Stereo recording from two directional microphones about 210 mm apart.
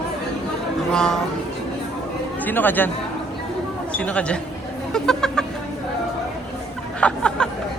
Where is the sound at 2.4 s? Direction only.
10° left (ahead or behind).